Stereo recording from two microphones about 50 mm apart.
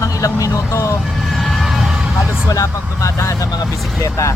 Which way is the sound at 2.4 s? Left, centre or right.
Left.